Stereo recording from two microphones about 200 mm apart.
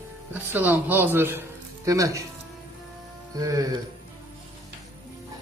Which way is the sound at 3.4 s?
15° right (ahead or behind).